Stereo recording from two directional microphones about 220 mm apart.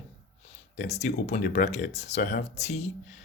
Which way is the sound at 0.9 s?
30° left (ahead or behind).